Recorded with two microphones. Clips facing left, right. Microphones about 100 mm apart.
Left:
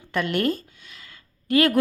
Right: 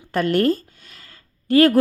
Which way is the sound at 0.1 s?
40° right (ahead or behind).